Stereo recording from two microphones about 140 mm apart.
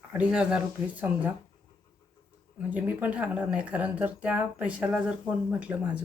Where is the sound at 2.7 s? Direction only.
10° right (ahead or behind).